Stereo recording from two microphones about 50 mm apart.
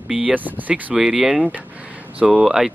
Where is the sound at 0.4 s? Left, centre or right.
Right.